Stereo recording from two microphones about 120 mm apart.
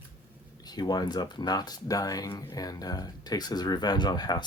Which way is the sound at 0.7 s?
35° left (ahead or behind).